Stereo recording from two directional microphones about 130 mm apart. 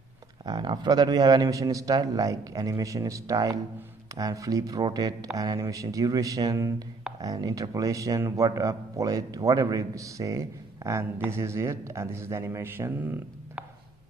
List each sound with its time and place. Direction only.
0.5 s speech: 35° right (ahead or behind); by 13.7 s 15° right (ahead or behind)